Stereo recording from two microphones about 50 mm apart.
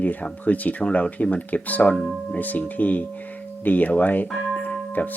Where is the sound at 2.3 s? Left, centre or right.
Left.